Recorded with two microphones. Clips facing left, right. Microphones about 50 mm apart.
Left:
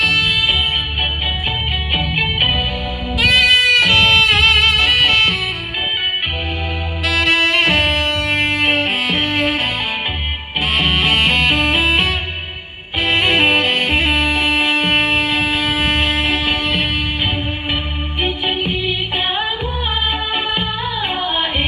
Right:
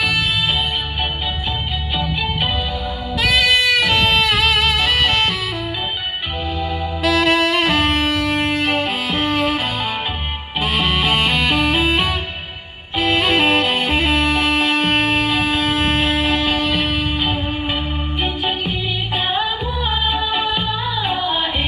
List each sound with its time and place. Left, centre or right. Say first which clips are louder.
2.0 s music: left 2 dB; left
3.2 s music: left 3 dB; centre
3.8 s music: left 3 dB; left
4.4 s music: left 3 dB; centre
7.1 s saxophone: even; centre
8.5 s music: left 2 dB; left
10.6 s music: left 2 dB; centre
13.2 s music: left 2 dB; centre
16.4 s music: even; left
18.2 s music: left 3 dB; left
20.1 s music: right 1 dB; left